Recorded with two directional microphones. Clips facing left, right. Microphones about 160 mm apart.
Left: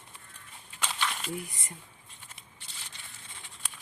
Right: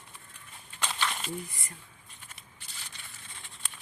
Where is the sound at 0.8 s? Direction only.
5° left (ahead or behind).